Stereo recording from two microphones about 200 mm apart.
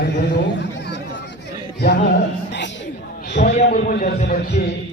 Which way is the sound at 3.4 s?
40° left (ahead or behind).